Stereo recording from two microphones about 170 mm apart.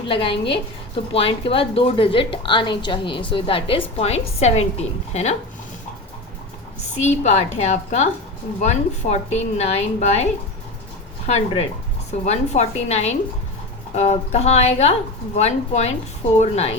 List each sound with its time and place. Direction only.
0.1 s a woman's voice: 30° left (ahead or behind)
7.0 s a woman's voice: 40° left (ahead or behind)
11.3 s a woman's voice: 40° left (ahead or behind)